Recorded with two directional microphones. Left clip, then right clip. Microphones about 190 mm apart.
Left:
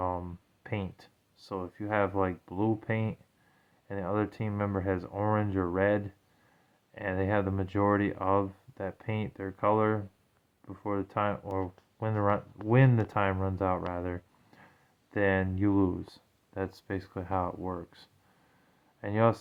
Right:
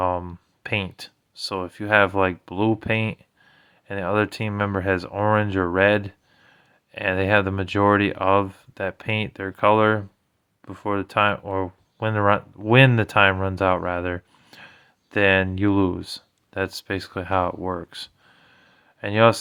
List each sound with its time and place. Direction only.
0.0 s speech: 30° right (ahead or behind)